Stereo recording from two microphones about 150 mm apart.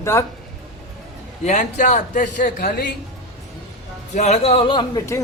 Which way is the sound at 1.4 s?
55° left (ahead or behind).